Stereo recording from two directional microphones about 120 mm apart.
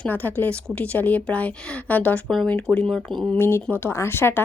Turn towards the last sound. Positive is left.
turn(degrees=20)  # may be behind; listen again after turning